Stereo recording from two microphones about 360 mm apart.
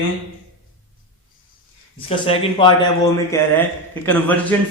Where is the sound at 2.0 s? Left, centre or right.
Centre.